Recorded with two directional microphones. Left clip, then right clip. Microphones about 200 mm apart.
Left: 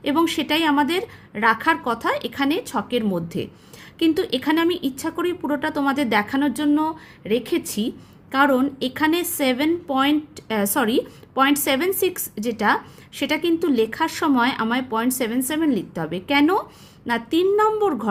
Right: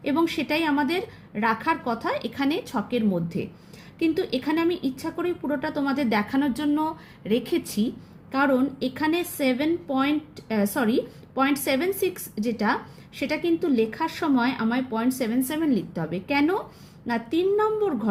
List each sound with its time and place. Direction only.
0.0 s a woman's voice: 30° left (ahead or behind)